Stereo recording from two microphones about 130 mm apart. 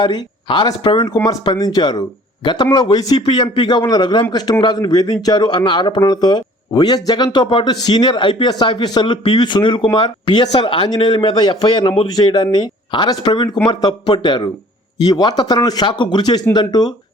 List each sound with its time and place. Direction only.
0.0 s a man's voice: 35° left (ahead or behind)